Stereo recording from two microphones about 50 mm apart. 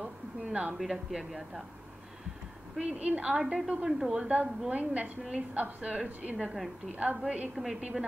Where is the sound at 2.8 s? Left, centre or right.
Right; by 4.3 s centre.